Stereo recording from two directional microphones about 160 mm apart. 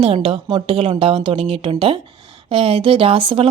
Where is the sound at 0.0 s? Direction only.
35° right (ahead or behind).